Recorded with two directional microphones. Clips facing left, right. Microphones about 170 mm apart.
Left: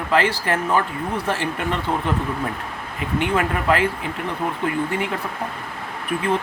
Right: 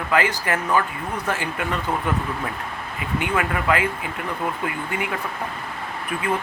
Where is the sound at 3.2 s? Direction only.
30° left (ahead or behind).